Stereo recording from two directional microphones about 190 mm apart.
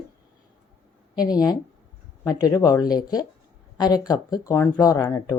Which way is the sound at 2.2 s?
20° left (ahead or behind).